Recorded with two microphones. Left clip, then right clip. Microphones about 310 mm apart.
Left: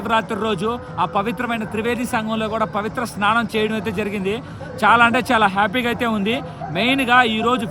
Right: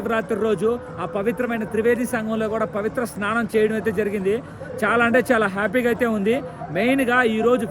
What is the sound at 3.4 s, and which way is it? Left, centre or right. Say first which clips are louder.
Speech: even; centre.